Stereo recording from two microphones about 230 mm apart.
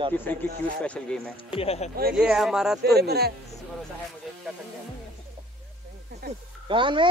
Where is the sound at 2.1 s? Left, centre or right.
Centre.